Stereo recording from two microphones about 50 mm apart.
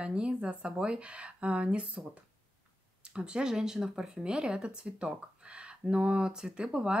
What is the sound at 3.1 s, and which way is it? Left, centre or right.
Speech, centre.